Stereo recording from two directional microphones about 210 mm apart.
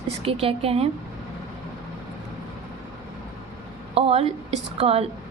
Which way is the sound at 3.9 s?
30° right (ahead or behind).